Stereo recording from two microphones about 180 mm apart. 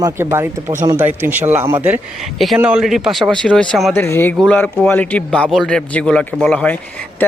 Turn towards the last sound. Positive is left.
turn(degrees=10)  # may be behind; listen again after turning